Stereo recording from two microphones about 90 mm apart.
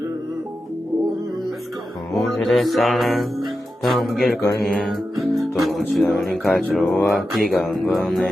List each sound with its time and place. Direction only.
2.1 s music: centre (ahead or behind)
4.4 s mantra: 40° left (ahead or behind)
5.4 s music: centre (ahead or behind)